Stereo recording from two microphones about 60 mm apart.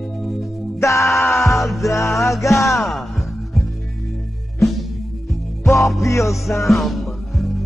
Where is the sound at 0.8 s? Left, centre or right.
Left.